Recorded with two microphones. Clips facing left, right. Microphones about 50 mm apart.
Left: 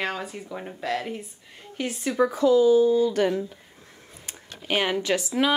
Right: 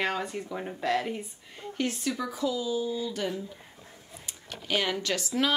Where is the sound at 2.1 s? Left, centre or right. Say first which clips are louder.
Left 11 dB; left.